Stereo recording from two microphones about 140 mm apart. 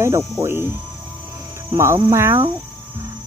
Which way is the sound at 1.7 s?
20° right (ahead or behind).